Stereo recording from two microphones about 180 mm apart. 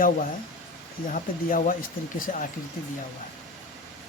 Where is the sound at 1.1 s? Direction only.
50° left (ahead or behind).